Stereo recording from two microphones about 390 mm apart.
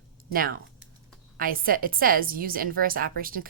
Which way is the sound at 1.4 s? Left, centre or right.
Right.